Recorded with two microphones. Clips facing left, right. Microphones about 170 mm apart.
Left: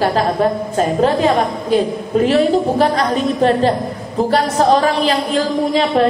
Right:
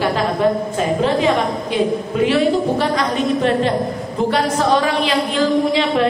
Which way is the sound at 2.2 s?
40° left (ahead or behind).